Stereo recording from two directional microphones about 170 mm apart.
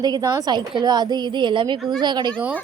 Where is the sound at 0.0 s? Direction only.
20° right (ahead or behind).